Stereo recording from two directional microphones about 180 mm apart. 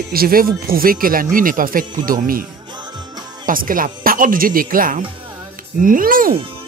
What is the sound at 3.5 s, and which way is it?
Speech, 50° right (ahead or behind).